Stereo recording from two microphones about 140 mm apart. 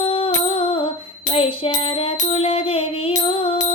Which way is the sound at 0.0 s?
40° left (ahead or behind).